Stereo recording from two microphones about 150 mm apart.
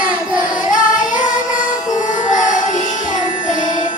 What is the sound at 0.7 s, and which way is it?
Music, 60° left (ahead or behind).